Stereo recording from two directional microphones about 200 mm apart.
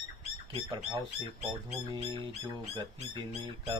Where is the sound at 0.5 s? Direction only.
25° right (ahead or behind).